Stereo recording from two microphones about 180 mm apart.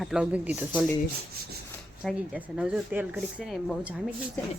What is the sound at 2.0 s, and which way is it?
Speech, 5° right (ahead or behind).